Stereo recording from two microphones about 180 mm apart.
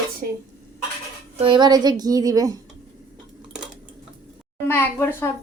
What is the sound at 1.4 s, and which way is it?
A woman's voice, 25° right (ahead or behind).